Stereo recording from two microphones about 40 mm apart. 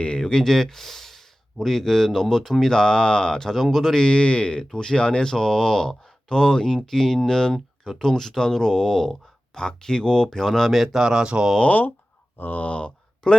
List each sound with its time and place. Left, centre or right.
0.2 s speech: centre
3.5 s speech: centre
3.9 s speech: left
10.7 s speech: centre
12.4 s speech: left
13.2 s speech: centre